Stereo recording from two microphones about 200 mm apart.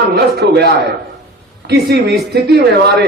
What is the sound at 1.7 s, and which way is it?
A man's voice, 55° right (ahead or behind).